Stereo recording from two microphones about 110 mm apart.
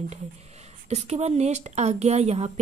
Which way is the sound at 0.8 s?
80° right.